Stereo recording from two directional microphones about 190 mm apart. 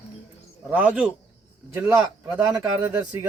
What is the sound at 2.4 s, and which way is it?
Speech, 15° right (ahead or behind).